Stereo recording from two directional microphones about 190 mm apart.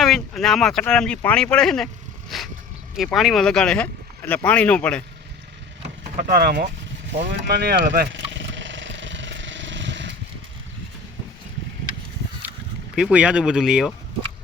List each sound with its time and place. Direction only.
0.0 s speech: centre (ahead or behind)
6.1 s speech: 50° right (ahead or behind)
8.3 s a sound: 75° right (ahead or behind)
13.0 s speech: 5° right (ahead or behind)